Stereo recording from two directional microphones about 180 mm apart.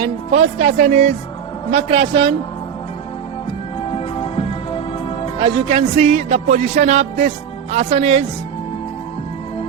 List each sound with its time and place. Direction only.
0.0 s music: 40° right (ahead or behind)
1.7 s a man's voice: 30° right (ahead or behind)
3.9 s music: 30° left (ahead or behind)
5.4 s music: 35° right (ahead or behind)